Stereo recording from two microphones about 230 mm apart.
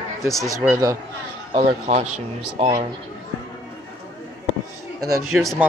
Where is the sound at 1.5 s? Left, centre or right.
Right.